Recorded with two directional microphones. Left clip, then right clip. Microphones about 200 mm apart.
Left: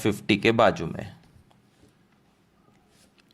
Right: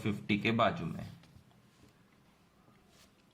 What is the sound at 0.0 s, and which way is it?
Speech, 50° left (ahead or behind).